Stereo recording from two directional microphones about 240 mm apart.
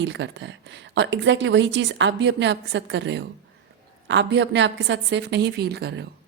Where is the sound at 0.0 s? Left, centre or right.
Right.